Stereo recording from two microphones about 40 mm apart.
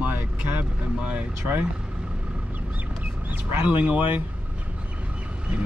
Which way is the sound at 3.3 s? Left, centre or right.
Right.